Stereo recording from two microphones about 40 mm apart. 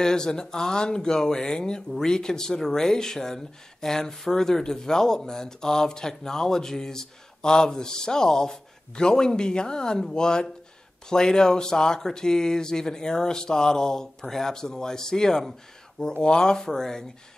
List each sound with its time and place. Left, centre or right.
0.0 s speech: centre